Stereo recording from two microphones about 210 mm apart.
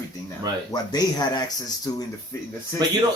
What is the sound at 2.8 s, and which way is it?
Speech, 20° right (ahead or behind).